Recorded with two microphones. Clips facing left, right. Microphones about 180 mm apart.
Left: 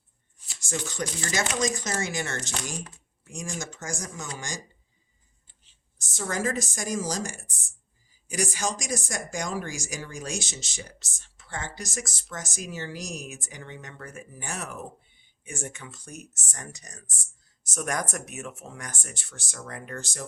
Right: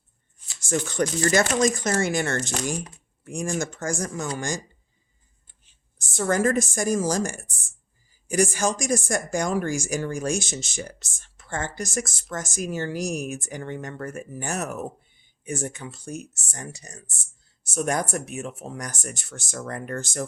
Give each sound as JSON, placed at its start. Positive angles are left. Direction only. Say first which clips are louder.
{"t": 0.7, "sound": "speech", "louder": "right 8 dB", "side_deg": -55}
{"t": 6.1, "sound": "speech", "louder": "right 7 dB", "side_deg": -55}